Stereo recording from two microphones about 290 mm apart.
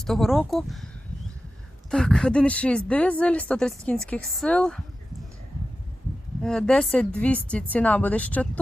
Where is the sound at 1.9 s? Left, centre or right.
Centre.